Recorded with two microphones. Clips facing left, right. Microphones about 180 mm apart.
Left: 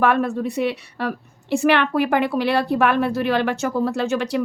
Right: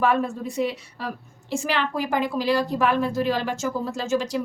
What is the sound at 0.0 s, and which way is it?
A woman's voice, 65° left (ahead or behind).